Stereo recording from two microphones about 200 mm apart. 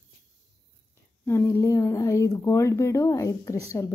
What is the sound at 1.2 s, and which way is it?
Speech, 10° left (ahead or behind).